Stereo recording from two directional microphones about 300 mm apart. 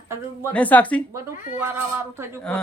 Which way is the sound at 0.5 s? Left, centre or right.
Centre.